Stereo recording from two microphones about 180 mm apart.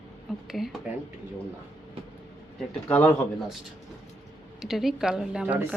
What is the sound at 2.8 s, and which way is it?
Speech, 10° left (ahead or behind).